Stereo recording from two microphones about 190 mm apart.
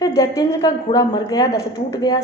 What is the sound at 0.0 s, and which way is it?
A woman's voice, 20° left (ahead or behind).